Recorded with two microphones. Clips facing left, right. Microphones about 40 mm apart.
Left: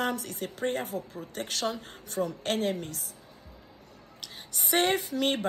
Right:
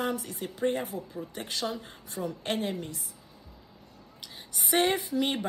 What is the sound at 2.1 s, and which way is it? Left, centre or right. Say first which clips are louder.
Speech: left 3 dB; centre.